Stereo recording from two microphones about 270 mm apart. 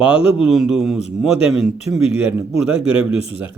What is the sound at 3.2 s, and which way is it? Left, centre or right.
Speech, left.